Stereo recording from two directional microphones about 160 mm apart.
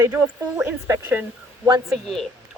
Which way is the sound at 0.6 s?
15° right (ahead or behind).